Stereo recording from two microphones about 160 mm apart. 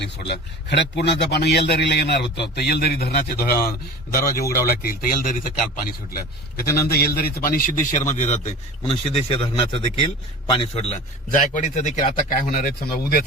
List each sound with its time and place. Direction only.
0.0 s a man's voice: 90° left; by 8.4 s 50° left (ahead or behind)
8.9 s a man's voice: 35° left (ahead or behind)
11.3 s a man's voice: 50° left (ahead or behind)